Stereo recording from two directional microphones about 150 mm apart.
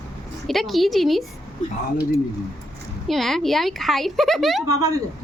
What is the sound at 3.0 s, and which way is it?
A woman's voice, centre (ahead or behind).